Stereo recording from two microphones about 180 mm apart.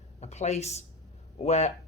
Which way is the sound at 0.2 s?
40° left (ahead or behind).